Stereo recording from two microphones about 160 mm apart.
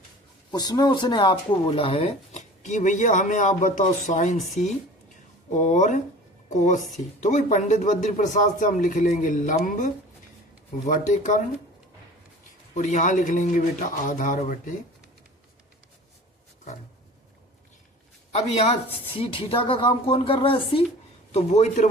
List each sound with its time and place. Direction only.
0.5 s speech: 25° left (ahead or behind); by 11.4 s 50° left (ahead or behind)
12.7 s speech: 50° left (ahead or behind)
18.3 s speech: 40° left (ahead or behind)
21.3 s speech: 45° left (ahead or behind)